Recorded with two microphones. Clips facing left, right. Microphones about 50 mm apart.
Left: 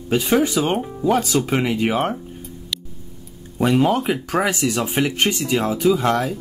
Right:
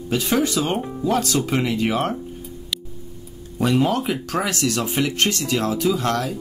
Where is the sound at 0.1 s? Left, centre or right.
Centre.